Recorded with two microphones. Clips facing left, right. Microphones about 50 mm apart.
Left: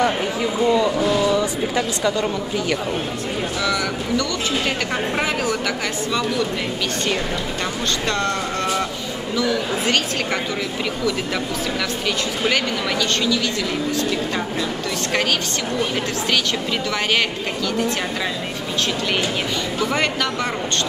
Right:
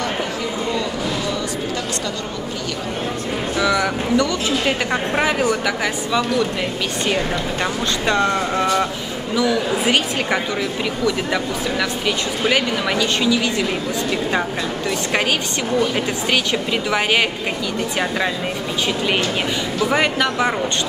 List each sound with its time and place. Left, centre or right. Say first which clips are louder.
3.6 s speech: right 5 dB; centre
8.1 s a woman's voice: right 7 dB; centre
12.4 s speech: right 3 dB; centre
19.9 s speech: right 5 dB; centre